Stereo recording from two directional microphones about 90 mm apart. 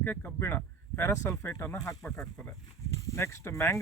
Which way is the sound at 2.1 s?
10° left (ahead or behind).